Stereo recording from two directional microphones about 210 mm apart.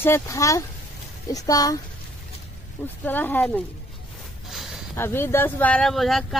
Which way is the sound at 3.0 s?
10° left (ahead or behind).